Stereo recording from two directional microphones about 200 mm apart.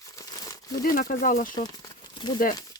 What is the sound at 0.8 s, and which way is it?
Speech, 45° left (ahead or behind).